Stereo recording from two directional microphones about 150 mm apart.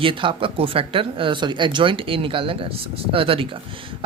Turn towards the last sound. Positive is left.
turn(degrees=-35)  # may be behind; listen again after turning